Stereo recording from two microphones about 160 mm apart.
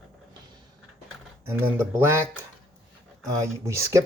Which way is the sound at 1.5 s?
15° right (ahead or behind).